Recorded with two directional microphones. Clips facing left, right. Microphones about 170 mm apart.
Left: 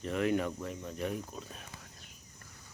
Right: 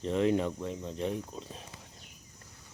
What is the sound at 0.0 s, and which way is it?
Speech, 25° right (ahead or behind).